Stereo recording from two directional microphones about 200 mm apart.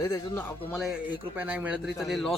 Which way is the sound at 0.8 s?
5° right (ahead or behind).